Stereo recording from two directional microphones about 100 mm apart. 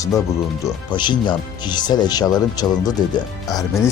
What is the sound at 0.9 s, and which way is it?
Speech, 50° left (ahead or behind).